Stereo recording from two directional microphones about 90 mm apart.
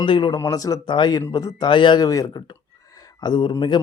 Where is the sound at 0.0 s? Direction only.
70° left (ahead or behind).